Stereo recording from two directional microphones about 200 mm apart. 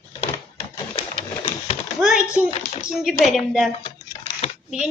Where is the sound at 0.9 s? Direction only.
25° left (ahead or behind).